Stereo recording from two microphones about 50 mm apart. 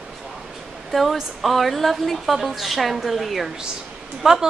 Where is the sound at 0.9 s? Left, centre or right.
Centre.